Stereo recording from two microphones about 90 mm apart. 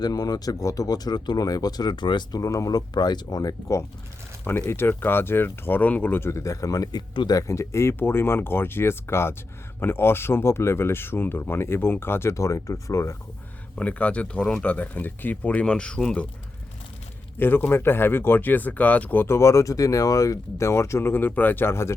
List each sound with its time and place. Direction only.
0.0 s speech: 45° left (ahead or behind)
2.4 s speech: 40° left (ahead or behind)
4.7 s speech: 25° left (ahead or behind)
13.7 s speech: 15° left (ahead or behind)
17.3 s speech: 25° left (ahead or behind)